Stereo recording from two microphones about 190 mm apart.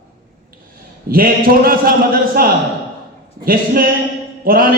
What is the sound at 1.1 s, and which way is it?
A man's voice, 50° right (ahead or behind).